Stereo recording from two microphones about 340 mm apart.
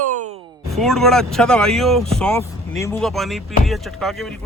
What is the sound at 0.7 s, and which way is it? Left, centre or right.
Speech, centre.